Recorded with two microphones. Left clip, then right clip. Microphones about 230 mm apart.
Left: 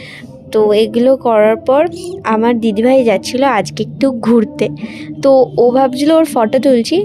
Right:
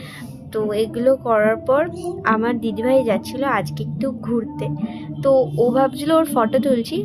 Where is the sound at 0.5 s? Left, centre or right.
Left.